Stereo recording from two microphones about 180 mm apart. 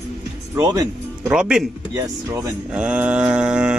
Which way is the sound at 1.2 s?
5° right (ahead or behind).